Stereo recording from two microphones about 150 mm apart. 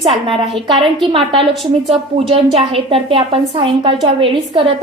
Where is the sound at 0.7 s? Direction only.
35° right (ahead or behind).